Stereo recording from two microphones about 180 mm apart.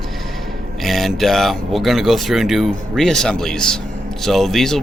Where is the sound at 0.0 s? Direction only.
Centre (ahead or behind).